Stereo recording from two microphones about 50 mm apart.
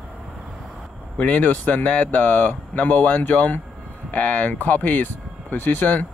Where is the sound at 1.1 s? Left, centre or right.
Left.